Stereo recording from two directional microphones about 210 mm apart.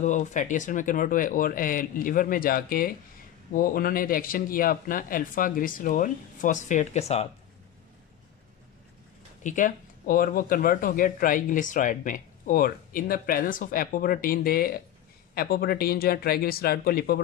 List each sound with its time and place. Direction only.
0.0 s speech: 35° left (ahead or behind)
9.4 s speech: 40° left (ahead or behind)